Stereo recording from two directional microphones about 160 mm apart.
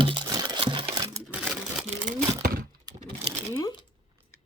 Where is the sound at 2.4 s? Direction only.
65° right (ahead or behind).